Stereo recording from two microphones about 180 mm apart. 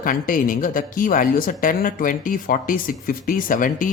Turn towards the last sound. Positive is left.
turn(degrees=50)  # may be behind; listen again after turning